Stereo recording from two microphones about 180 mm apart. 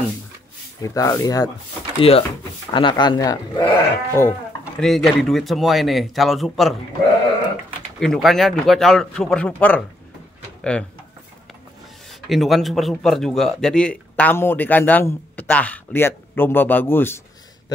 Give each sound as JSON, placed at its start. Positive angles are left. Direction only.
{"t": 0.8, "sound": "speech", "side_deg": 15}
{"t": 2.0, "sound": "speech", "side_deg": 30}
{"t": 4.7, "sound": "speech", "side_deg": 0}
{"t": 8.0, "sound": "speech", "side_deg": 0}
{"t": 12.1, "sound": "a man's voice", "side_deg": 0}